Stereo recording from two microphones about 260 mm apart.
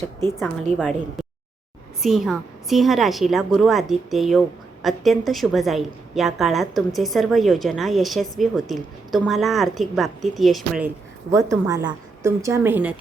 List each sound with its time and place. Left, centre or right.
0.7 s a woman's voice: right
2.0 s a woman's voice: centre